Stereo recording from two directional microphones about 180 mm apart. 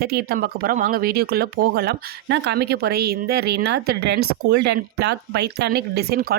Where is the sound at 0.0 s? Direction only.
60° right (ahead or behind).